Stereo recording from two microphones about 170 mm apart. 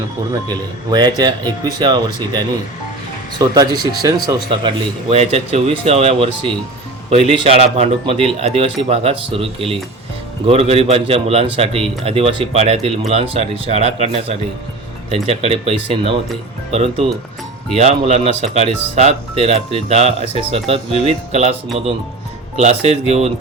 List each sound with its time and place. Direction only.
0.4 s speech: 25° right (ahead or behind)
4.6 s a man's voice: 35° right (ahead or behind)
22.5 s a man's voice: 35° right (ahead or behind)